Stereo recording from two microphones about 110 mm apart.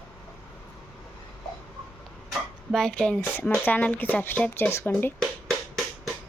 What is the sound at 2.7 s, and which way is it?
Speech, 5° left (ahead or behind).